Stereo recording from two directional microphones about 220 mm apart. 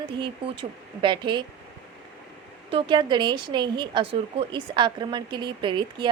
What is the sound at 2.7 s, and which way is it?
A woman's voice, 20° right (ahead or behind).